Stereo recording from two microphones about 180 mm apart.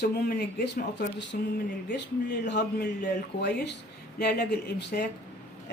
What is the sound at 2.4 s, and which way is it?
A woman's voice, 70° left (ahead or behind).